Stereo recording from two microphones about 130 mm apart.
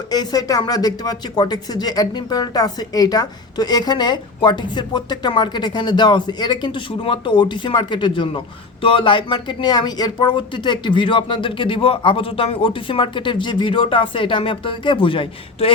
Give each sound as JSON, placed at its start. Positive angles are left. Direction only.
{"t": 0.1, "sound": "speech", "side_deg": 30}